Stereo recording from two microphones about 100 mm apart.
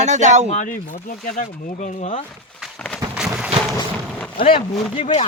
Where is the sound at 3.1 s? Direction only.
10° right (ahead or behind).